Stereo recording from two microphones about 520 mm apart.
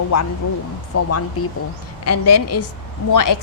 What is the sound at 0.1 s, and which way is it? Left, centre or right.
A woman's voice, left.